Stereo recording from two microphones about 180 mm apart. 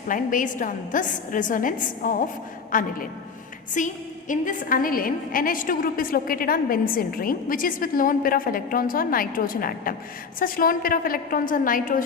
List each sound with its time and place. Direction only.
0.1 s a woman's voice: 45° left (ahead or behind)